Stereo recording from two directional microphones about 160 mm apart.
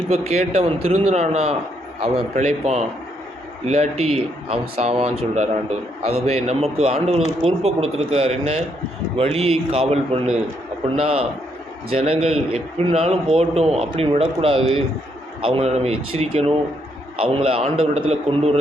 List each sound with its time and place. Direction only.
0.1 s a man's voice: 40° right (ahead or behind)